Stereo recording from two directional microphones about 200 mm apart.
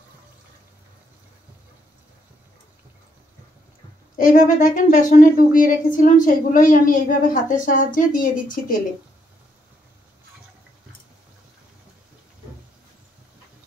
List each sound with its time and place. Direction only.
4.2 s a woman's voice: 40° left (ahead or behind)